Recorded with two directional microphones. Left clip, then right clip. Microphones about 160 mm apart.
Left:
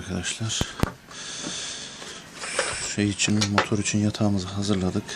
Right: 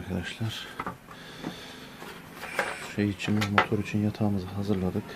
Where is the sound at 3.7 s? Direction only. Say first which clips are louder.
Left 4 dB; 40° left (ahead or behind).